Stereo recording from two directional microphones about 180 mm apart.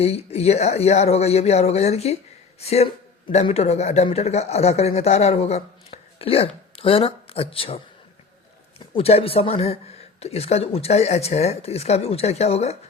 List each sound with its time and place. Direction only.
0.0 s speech: 35° left (ahead or behind)
8.9 s speech: 35° left (ahead or behind)